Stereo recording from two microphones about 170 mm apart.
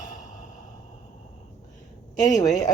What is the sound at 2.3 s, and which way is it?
Speech, 45° left (ahead or behind).